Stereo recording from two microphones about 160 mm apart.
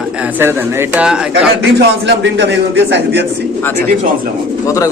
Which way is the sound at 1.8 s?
90° right.